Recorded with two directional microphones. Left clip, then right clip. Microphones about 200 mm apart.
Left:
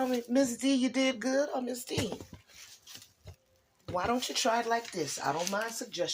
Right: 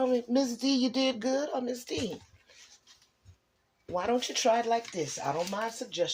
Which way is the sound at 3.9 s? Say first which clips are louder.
Right 1 dB; 30° right (ahead or behind).